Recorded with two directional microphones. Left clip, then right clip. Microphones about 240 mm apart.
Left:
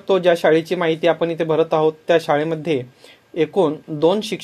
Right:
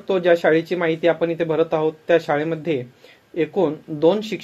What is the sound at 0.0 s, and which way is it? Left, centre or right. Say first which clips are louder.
Speech: left 2 dB; left.